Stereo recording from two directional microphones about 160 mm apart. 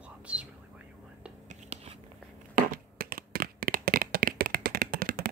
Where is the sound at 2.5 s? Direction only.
65° right (ahead or behind).